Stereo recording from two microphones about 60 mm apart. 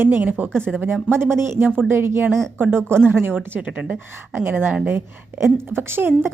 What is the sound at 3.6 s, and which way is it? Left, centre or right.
Speech, right.